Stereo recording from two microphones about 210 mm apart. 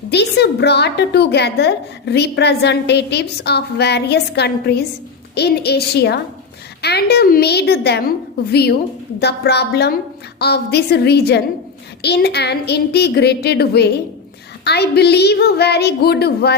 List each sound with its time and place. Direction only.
0.1 s a woman's voice: 50° left (ahead or behind)